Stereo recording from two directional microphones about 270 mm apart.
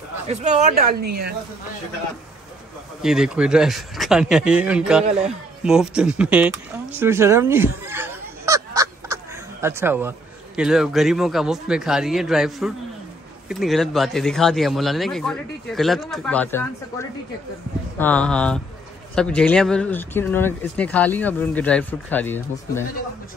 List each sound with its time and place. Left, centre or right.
0.3 s speech: right
3.0 s speech: centre